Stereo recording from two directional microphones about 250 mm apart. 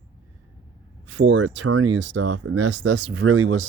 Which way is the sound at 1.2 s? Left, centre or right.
Right.